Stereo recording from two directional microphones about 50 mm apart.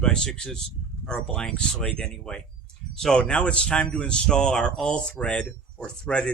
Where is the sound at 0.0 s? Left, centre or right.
Centre.